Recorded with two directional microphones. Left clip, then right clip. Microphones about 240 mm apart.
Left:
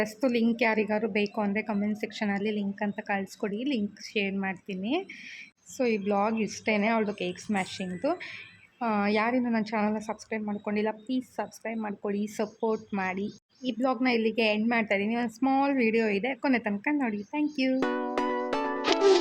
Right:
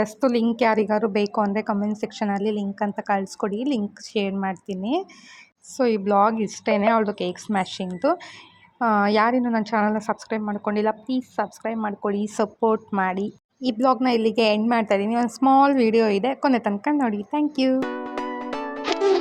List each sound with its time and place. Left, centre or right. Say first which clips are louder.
0.0 s a woman's voice: right 6 dB; centre
17.7 s music: right 1 dB; centre